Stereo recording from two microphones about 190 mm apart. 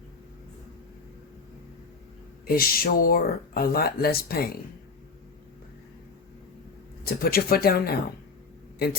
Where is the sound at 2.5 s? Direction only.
50° left (ahead or behind).